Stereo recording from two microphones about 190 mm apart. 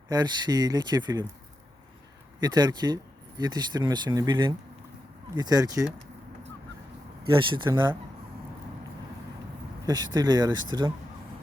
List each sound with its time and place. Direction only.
0.1 s speech: 20° right (ahead or behind)
2.4 s speech: 20° right (ahead or behind)
7.3 s speech: 25° right (ahead or behind)
9.8 s speech: 20° right (ahead or behind)